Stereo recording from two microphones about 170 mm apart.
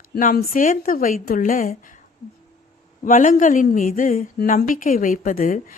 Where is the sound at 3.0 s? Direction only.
50° left (ahead or behind).